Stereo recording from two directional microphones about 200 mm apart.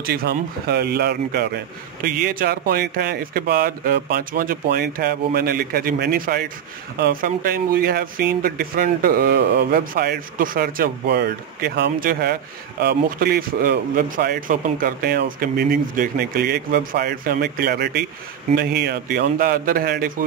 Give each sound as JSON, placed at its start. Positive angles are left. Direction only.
{"t": 0.0, "sound": "speech", "side_deg": -50}